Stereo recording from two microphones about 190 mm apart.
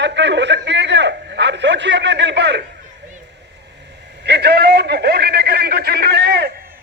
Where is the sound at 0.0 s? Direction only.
65° right (ahead or behind).